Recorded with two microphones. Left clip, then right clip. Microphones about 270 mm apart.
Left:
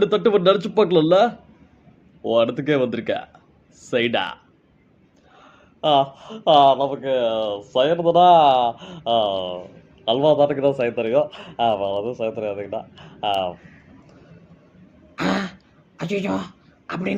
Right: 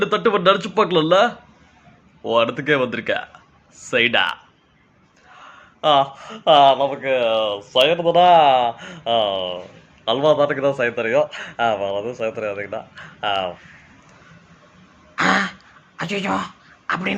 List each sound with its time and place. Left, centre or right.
0.0 s a man's voice: centre
2.3 s speech: centre
5.4 s a man's voice: centre
8.0 s speech: right
8.6 s a man's voice: centre
15.1 s throat clearing: centre